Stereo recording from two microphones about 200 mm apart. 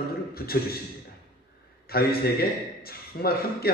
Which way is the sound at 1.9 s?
50° left (ahead or behind).